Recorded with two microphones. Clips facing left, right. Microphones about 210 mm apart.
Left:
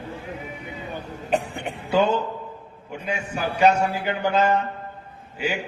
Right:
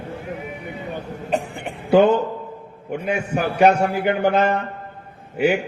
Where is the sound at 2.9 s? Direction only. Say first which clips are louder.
Right 6 dB; 60° right (ahead or behind).